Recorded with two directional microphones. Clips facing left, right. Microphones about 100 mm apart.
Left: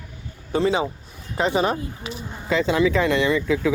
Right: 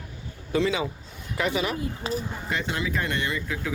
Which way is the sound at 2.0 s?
35° right (ahead or behind).